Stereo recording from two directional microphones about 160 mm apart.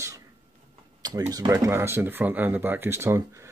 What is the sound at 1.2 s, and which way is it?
Speech, 25° right (ahead or behind).